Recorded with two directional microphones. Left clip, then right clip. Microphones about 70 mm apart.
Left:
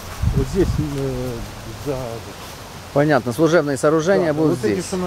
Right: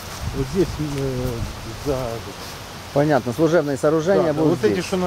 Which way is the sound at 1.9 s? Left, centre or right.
Centre.